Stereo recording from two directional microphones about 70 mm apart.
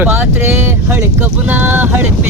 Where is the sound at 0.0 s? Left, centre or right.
Right.